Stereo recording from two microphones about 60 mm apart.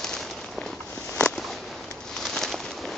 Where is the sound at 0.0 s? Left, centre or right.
Centre.